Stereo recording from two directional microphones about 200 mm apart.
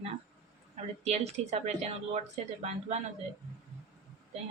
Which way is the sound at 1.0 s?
35° right (ahead or behind).